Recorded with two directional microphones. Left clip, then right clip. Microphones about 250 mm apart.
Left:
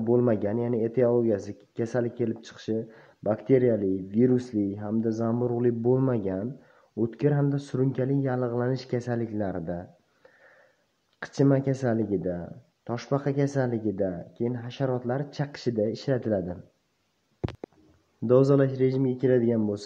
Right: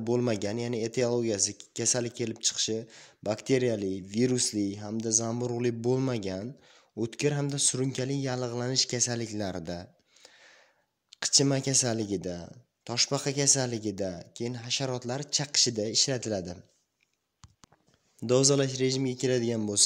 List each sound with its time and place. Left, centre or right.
0.0 s speech: right
5.3 s speech: right
11.1 s speech: right
18.2 s speech: right